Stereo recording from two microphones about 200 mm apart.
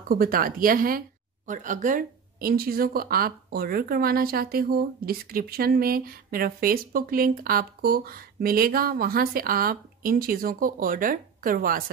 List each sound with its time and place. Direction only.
0.1 s speech: 45° right (ahead or behind)